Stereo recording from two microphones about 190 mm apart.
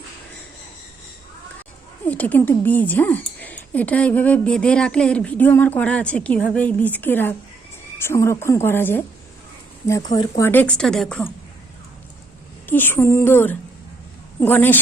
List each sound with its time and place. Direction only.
2.0 s a woman's voice: 10° left (ahead or behind)
10.1 s a woman's voice: 20° left (ahead or behind); by 11.2 s centre (ahead or behind)
12.6 s a woman's voice: 10° left (ahead or behind)